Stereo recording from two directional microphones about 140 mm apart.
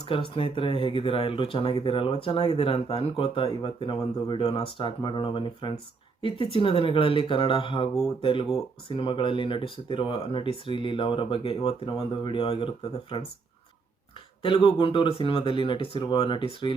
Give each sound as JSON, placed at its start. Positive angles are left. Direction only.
{"t": 0.0, "sound": "speech", "side_deg": 40}
{"t": 14.4, "sound": "speech", "side_deg": 35}